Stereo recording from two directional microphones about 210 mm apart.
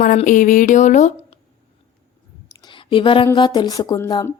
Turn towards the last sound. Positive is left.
turn(degrees=15)  # may be behind; listen again after turning